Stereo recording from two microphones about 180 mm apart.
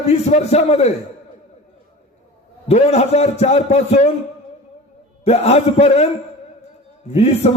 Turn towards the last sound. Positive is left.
turn(degrees=35)  # may be behind; listen again after turning